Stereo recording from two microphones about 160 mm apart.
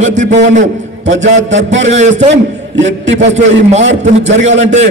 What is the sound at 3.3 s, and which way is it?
A man's voice, 45° right (ahead or behind).